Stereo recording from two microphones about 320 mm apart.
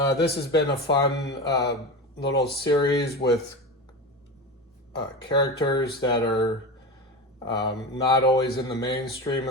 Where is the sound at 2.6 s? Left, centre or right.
Centre.